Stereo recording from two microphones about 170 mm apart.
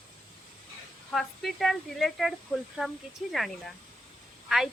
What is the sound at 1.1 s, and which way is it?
A woman's voice, centre (ahead or behind).